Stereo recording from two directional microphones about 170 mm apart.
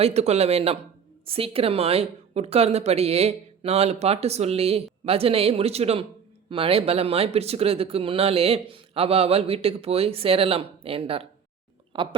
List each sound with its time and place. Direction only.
0.0 s a woman's voice: 40° right (ahead or behind)